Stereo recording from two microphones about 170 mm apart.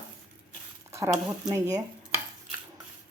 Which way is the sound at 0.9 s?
15° right (ahead or behind).